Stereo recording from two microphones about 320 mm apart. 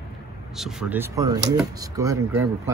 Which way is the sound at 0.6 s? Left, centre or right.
Centre.